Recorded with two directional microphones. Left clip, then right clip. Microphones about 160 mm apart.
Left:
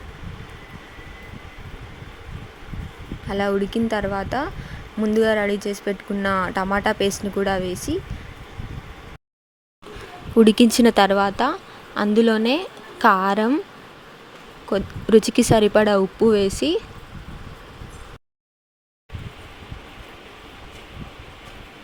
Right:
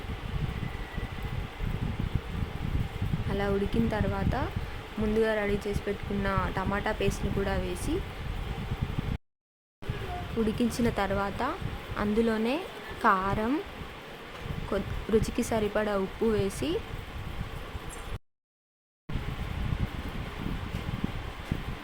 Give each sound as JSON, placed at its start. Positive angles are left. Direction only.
{"t": 3.2, "sound": "speech", "side_deg": 45}
{"t": 10.4, "sound": "speech", "side_deg": 70}
{"t": 14.7, "sound": "speech", "side_deg": 50}